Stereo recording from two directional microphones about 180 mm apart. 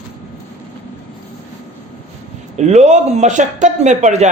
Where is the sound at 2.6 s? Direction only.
40° right (ahead or behind).